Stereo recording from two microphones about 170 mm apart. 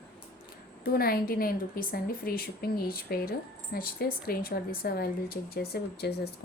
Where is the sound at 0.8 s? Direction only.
60° left (ahead or behind).